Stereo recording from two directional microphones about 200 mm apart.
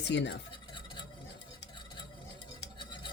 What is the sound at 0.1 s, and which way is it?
Speech, 60° left (ahead or behind).